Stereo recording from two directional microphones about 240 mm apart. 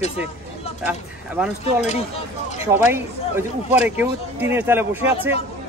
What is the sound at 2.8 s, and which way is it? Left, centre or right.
Speech, centre.